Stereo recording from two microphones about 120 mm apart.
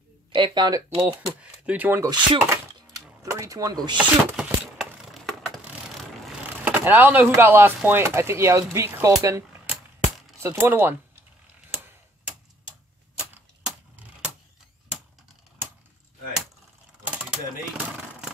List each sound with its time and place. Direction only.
0.3 s speech: 40° right (ahead or behind)
1.0 s speech: 10° right (ahead or behind)
2.0 s speech: 25° right (ahead or behind)
4.0 s a sound: 10° right (ahead or behind)
6.6 s speech: 15° right (ahead or behind)
9.2 s a sound: 25° right (ahead or behind)
10.4 s speech: 20° right (ahead or behind)
17.0 s mechanisms: 10° right (ahead or behind)